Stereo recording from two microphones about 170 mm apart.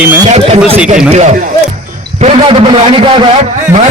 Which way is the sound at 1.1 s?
40° right (ahead or behind).